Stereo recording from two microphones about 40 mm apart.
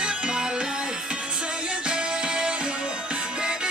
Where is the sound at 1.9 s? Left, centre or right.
Right.